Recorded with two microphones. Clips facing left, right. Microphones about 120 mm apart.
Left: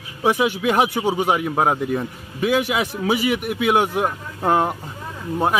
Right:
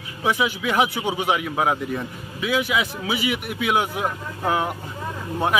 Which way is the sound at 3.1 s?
45° left (ahead or behind).